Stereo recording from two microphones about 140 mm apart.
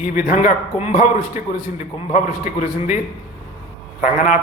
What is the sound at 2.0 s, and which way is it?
Speech, 60° left (ahead or behind).